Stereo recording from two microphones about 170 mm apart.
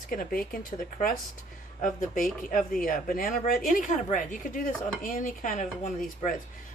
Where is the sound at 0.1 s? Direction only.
60° left (ahead or behind).